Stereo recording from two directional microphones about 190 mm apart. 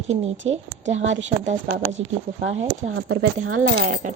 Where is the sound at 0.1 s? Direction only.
35° right (ahead or behind).